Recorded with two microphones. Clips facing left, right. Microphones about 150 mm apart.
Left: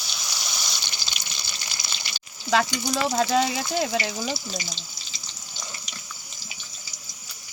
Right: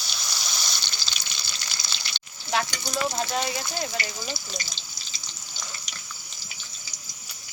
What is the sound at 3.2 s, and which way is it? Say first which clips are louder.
Speech: left 6 dB; 90° left.